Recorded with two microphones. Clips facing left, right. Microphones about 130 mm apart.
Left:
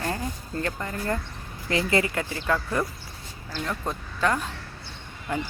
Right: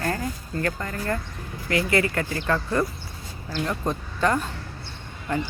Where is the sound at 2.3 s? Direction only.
5° left (ahead or behind).